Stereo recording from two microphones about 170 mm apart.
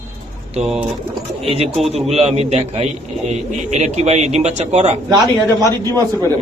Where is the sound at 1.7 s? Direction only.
Centre (ahead or behind).